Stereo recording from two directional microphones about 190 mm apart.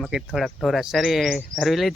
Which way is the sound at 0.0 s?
Centre (ahead or behind).